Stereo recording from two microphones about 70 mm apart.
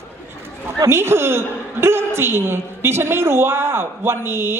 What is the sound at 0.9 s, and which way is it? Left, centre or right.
A woman's voice, right.